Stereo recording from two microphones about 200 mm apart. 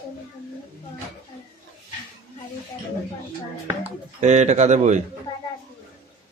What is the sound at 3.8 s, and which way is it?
Speech, 35° right (ahead or behind).